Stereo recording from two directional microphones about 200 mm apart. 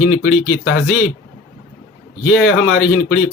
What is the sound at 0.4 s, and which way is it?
Speech, 65° left (ahead or behind).